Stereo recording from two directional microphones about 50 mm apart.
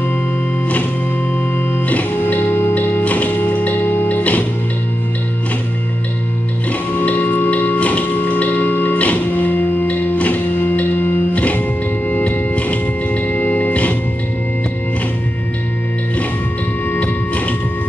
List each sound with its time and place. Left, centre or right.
1.9 s music: left
7.0 s music: left